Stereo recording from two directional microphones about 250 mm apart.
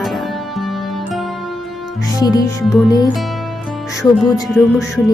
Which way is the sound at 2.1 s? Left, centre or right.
Centre.